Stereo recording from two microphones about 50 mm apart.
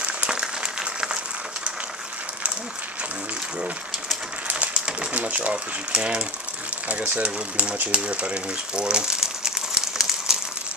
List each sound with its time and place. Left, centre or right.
0.3 s applause: centre
4.5 s typewriter: right
6.9 s speech: right; by 10.4 s centre